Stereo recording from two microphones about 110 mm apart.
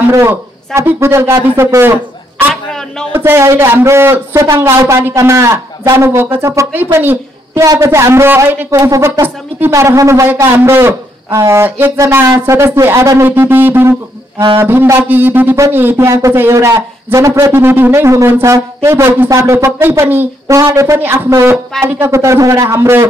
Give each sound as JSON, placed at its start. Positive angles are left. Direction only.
{"t": 0.1, "sound": "speech", "side_deg": -25}
{"t": 2.5, "sound": "a sound", "side_deg": 5}
{"t": 3.1, "sound": "a woman's voice", "side_deg": -20}
{"t": 17.5, "sound": "speech", "side_deg": -20}